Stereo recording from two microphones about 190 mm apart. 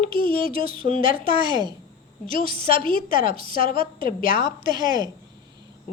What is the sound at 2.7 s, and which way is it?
A woman's voice, 45° left (ahead or behind).